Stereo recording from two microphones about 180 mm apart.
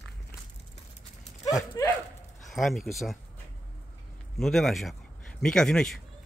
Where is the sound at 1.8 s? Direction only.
20° left (ahead or behind).